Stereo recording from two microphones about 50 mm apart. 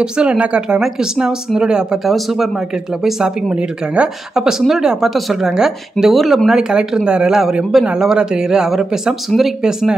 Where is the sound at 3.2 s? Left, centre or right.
Right.